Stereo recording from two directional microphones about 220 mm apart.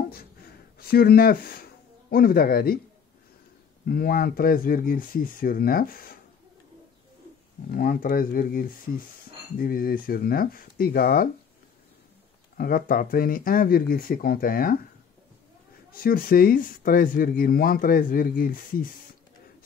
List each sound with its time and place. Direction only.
0.1 s a sound: 45° left (ahead or behind)
3.8 s speech: 40° left (ahead or behind)
7.7 s speech: 40° left (ahead or behind)
12.5 s speech: 40° left (ahead or behind)
15.9 s speech: 40° left (ahead or behind)